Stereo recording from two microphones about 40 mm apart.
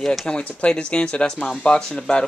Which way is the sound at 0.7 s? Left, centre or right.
Left.